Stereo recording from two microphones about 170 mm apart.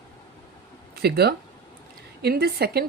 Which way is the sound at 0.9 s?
70° right (ahead or behind).